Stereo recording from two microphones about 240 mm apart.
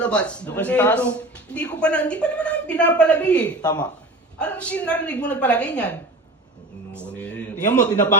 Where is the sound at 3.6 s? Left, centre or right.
Centre.